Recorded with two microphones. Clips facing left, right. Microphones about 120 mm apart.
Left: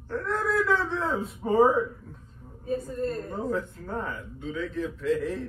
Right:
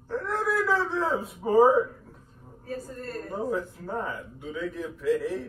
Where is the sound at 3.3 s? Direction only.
5° right (ahead or behind).